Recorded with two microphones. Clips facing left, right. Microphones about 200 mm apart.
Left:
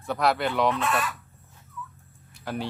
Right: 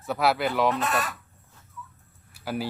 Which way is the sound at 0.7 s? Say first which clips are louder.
Even; 40° right (ahead or behind).